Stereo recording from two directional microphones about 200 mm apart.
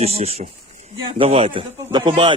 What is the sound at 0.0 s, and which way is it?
A man's voice, 30° right (ahead or behind).